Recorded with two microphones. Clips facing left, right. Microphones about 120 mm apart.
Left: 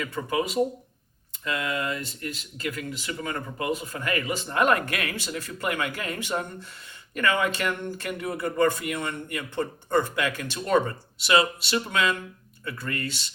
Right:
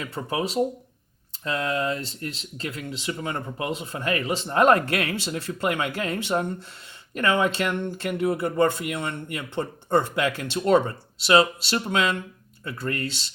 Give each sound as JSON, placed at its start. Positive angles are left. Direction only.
{"t": 0.0, "sound": "speech", "side_deg": -30}